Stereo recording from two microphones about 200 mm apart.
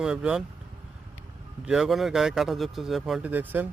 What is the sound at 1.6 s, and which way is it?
Speech, centre (ahead or behind).